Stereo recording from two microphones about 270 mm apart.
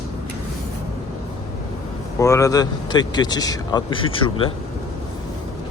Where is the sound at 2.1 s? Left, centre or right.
Centre.